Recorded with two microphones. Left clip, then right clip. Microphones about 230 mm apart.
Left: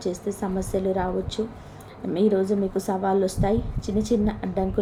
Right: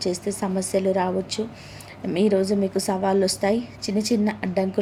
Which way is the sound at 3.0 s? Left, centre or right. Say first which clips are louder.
Right 2 dB; centre.